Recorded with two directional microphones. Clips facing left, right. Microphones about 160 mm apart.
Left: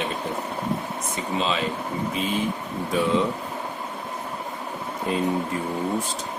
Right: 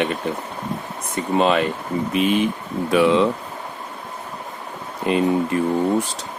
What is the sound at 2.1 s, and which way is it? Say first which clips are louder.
Speech: right 9 dB; 70° right (ahead or behind).